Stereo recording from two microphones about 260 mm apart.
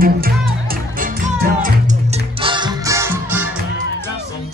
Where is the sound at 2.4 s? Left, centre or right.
Centre.